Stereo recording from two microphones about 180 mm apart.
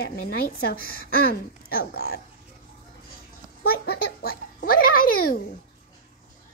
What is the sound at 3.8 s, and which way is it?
Music, 55° left (ahead or behind).